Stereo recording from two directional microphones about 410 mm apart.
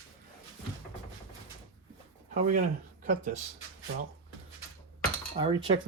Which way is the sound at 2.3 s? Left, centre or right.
Centre.